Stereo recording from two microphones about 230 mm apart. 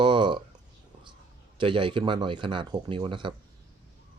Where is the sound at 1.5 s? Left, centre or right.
Right.